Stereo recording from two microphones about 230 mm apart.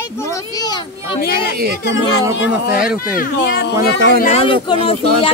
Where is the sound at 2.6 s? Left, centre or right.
Left.